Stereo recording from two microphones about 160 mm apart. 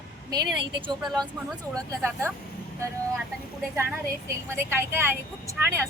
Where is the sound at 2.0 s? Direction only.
15° right (ahead or behind).